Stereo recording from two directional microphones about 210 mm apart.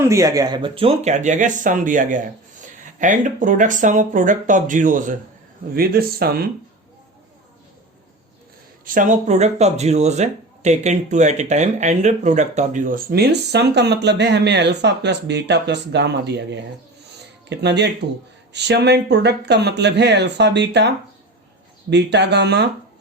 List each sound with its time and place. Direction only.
0.0 s speech: 15° right (ahead or behind); by 6.5 s 45° right (ahead or behind)
8.8 s speech: 40° right (ahead or behind)